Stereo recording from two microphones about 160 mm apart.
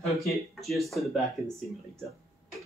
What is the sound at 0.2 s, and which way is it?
Speech, centre (ahead or behind).